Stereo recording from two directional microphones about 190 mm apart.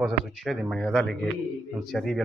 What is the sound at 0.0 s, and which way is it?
Speech, centre (ahead or behind).